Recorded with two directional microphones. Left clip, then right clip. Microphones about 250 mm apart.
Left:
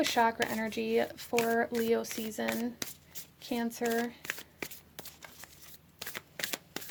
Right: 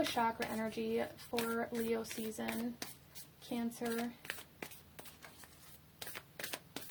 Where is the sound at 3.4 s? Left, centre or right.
Left.